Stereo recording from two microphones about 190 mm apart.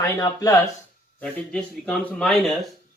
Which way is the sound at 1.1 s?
5° left (ahead or behind).